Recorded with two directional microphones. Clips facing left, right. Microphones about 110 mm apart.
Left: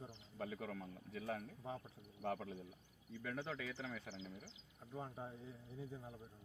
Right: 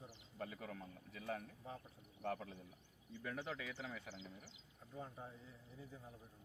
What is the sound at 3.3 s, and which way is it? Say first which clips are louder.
Speech: left 1 dB; 15° right (ahead or behind).